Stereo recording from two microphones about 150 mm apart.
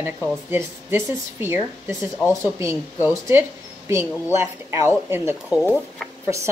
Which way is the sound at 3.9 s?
15° right (ahead or behind).